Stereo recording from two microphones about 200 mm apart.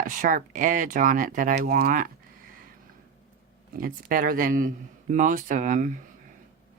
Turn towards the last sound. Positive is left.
turn(degrees=-40)  # may be behind; listen again after turning